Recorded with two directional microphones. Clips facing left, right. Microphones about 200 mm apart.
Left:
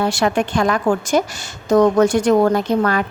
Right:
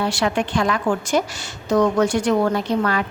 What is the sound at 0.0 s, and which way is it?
A woman's voice, 45° left (ahead or behind).